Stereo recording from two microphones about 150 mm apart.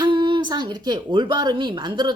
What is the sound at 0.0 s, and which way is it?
Speech, 30° right (ahead or behind).